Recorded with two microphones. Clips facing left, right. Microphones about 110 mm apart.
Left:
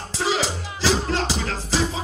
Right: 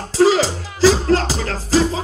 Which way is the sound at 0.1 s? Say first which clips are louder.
Right 10 dB; 40° right (ahead or behind).